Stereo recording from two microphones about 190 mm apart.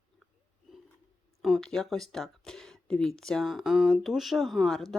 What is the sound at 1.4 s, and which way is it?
Speech, centre (ahead or behind).